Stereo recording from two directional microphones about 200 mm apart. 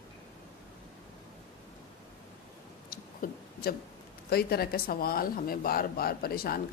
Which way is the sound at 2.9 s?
50° left (ahead or behind).